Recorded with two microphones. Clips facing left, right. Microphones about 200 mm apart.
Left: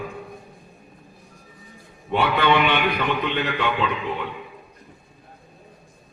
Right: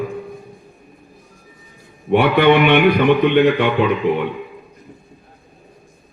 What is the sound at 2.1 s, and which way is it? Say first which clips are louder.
A man's voice: right 8 dB; 60° right (ahead or behind).